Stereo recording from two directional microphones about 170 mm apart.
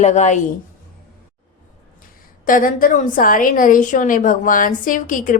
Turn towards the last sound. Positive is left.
turn(degrees=50)  # may be behind; listen again after turning